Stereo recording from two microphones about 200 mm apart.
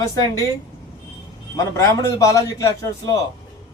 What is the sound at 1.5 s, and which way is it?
A man's voice, 15° left (ahead or behind).